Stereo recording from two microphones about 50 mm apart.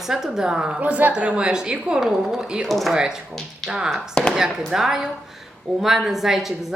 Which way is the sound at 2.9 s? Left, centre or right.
Centre.